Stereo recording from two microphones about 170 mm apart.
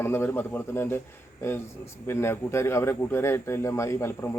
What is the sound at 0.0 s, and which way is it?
Speech, 15° left (ahead or behind).